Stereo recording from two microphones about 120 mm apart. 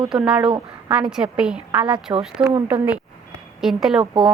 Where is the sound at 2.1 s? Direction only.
25° right (ahead or behind).